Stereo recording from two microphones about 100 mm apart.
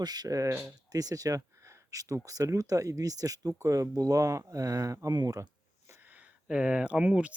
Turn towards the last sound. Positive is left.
turn(degrees=-15)  # may be behind; listen again after turning